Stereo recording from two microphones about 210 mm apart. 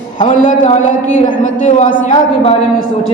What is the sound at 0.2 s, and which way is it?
Speech, 35° left (ahead or behind).